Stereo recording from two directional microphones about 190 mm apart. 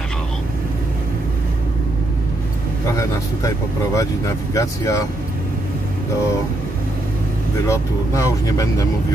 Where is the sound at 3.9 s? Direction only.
15° left (ahead or behind).